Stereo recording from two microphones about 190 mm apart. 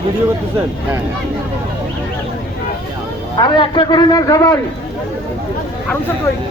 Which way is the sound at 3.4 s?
25° left (ahead or behind).